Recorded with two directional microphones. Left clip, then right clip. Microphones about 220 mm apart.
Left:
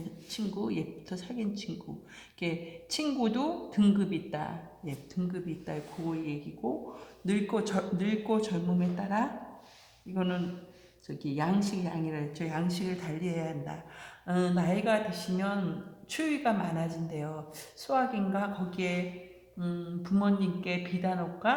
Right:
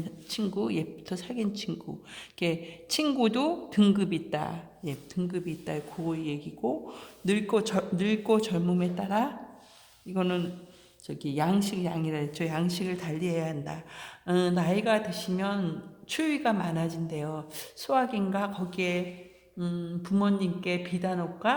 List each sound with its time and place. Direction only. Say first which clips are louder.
0.3 s a woman's voice: right 5 dB; 45° right (ahead or behind)